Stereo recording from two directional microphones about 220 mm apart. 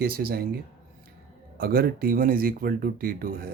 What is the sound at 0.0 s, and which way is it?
Speech, 45° right (ahead or behind).